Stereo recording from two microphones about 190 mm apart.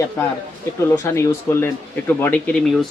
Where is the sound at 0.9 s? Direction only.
15° left (ahead or behind).